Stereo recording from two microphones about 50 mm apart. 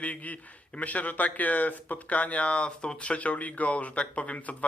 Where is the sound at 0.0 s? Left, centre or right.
Left.